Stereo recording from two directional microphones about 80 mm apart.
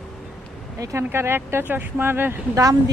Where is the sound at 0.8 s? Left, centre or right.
Right.